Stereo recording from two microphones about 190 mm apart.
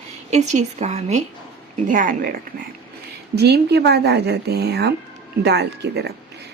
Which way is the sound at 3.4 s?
60° right (ahead or behind).